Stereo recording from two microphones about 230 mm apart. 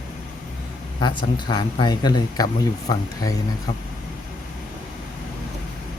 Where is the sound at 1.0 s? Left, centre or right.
Centre.